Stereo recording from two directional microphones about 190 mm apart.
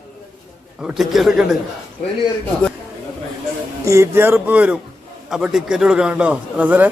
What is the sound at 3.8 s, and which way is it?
A man's voice, 15° right (ahead or behind).